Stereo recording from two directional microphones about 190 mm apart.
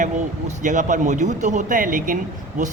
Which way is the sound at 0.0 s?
40° right (ahead or behind).